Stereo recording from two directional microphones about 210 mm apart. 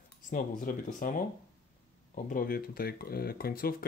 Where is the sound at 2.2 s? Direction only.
40° left (ahead or behind).